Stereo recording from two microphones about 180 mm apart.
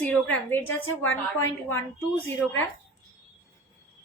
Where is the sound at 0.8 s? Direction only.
90° left.